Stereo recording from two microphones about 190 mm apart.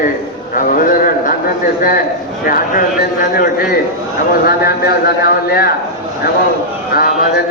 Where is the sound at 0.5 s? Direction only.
45° left (ahead or behind).